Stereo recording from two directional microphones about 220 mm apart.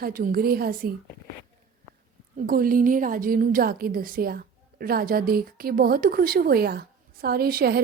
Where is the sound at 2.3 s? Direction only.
40° right (ahead or behind).